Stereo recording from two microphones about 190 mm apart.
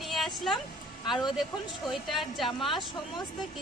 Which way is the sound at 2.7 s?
20° left (ahead or behind).